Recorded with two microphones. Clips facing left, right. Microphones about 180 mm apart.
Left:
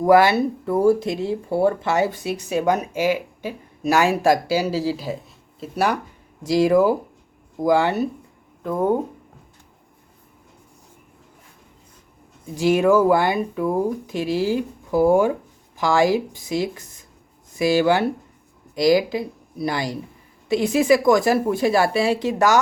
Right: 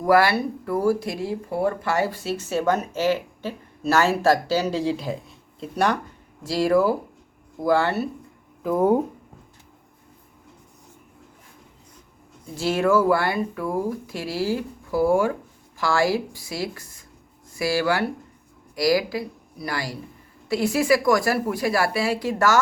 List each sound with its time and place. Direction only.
0.0 s speech: 20° left (ahead or behind)
8.6 s speech: 5° right (ahead or behind)
12.5 s speech: 15° left (ahead or behind)